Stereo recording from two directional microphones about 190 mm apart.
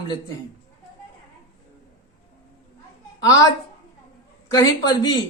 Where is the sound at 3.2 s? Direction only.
20° left (ahead or behind).